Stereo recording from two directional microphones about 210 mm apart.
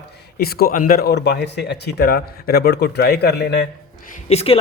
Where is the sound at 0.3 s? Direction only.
45° left (ahead or behind).